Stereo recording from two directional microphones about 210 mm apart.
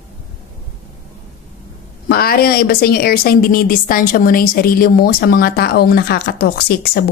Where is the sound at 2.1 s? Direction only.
45° left (ahead or behind).